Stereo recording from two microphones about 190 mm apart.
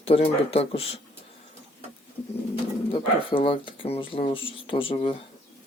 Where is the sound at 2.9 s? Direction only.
30° left (ahead or behind).